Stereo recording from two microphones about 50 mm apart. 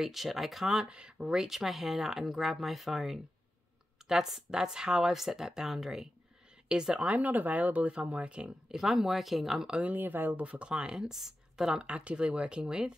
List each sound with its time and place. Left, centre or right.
0.0 s speech: centre
0.7 s speech: centre
1.2 s speech: centre
7.1 s speech: right
8.6 s speech: centre
9.7 s speech: right
9.9 s speech: right
10.4 s speech: right